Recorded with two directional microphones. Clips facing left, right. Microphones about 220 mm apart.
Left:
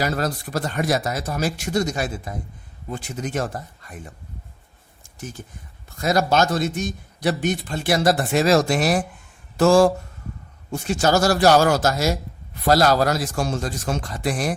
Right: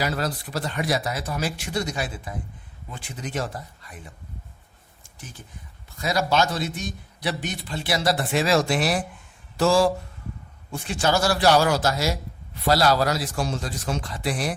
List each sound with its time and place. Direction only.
0.0 s a man's voice: 45° left (ahead or behind)
5.0 s a sound: 45° left (ahead or behind)
6.0 s a man's voice: 45° left (ahead or behind)